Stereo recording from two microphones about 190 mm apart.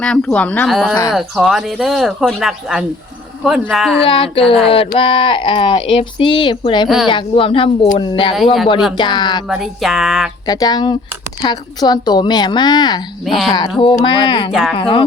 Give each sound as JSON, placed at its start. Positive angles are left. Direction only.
{"t": 0.0, "sound": "speech", "side_deg": 5}
{"t": 4.0, "sound": "speech", "side_deg": 30}
{"t": 4.4, "sound": "speech", "side_deg": 0}
{"t": 4.9, "sound": "speech", "side_deg": 30}
{"t": 6.8, "sound": "speech", "side_deg": 0}
{"t": 7.1, "sound": "speech", "side_deg": 25}
{"t": 9.5, "sound": "speech", "side_deg": 0}
{"t": 10.4, "sound": "speech", "side_deg": 20}
{"t": 13.2, "sound": "speech", "side_deg": 0}
{"t": 13.5, "sound": "speech", "side_deg": 25}
{"t": 14.5, "sound": "speech", "side_deg": 0}
{"t": 14.8, "sound": "speech", "side_deg": 25}